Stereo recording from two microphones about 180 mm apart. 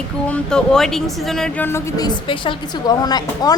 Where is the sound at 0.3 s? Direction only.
5° left (ahead or behind).